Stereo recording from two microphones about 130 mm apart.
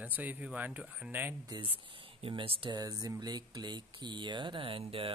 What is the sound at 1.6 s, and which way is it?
Speech, 45° right (ahead or behind).